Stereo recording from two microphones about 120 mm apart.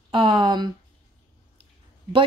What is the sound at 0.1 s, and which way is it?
Speech, 40° right (ahead or behind).